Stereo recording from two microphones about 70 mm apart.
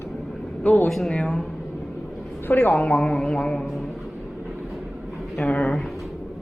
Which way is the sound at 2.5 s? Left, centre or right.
Left.